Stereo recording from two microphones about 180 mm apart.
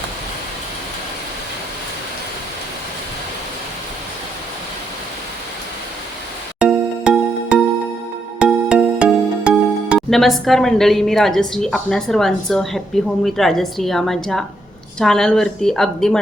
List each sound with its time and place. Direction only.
6.6 s music: 5° right (ahead or behind)
8.4 s a woman's voice: 5° right (ahead or behind)